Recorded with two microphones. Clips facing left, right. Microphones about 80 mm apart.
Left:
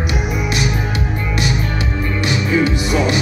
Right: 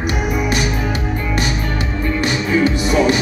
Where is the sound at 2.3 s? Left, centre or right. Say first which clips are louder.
Left 1 dB; right.